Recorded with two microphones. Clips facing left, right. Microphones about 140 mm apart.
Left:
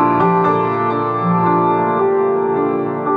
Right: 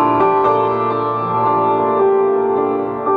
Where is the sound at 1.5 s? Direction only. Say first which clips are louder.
Right 2 dB; 10° right (ahead or behind).